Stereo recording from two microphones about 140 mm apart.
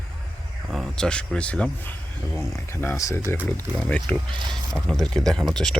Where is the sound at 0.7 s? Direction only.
Centre (ahead or behind).